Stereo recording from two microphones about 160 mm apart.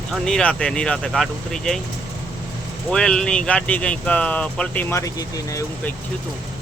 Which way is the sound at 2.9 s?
5° left (ahead or behind).